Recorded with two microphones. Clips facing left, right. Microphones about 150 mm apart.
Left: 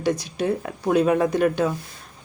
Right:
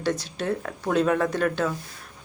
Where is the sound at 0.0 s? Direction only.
15° left (ahead or behind).